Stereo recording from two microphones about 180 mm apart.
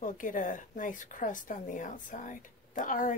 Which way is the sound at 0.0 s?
45° left (ahead or behind).